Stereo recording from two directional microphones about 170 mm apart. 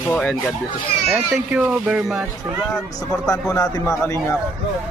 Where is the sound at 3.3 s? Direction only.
20° left (ahead or behind).